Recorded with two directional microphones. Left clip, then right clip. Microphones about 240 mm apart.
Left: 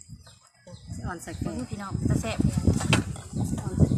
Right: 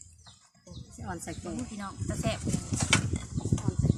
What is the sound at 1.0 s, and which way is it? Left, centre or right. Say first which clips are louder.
Speech: left 2 dB; right.